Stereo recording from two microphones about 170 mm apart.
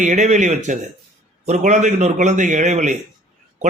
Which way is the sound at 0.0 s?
45° right (ahead or behind).